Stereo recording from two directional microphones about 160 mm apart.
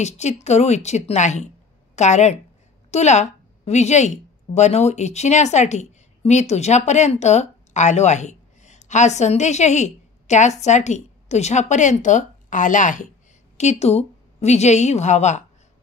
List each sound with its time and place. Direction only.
0.0 s a woman's voice: 45° left (ahead or behind)